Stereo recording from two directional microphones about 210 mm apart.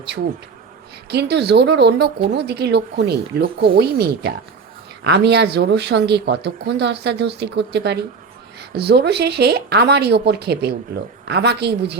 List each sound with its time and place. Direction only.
1.1 s speech: 50° right (ahead or behind)